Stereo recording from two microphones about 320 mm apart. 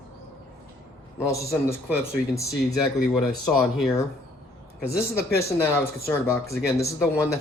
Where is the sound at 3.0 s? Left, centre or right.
Centre.